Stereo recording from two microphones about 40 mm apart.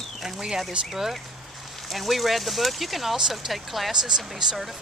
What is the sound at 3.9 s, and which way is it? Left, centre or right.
Speech, centre.